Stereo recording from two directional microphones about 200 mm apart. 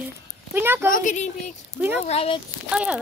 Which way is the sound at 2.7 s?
5° right (ahead or behind).